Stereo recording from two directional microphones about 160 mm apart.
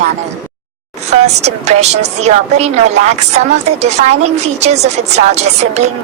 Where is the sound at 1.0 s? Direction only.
45° right (ahead or behind).